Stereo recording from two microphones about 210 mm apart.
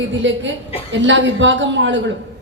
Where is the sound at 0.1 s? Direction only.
60° right (ahead or behind).